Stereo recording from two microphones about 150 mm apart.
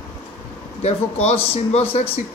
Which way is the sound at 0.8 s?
45° left (ahead or behind).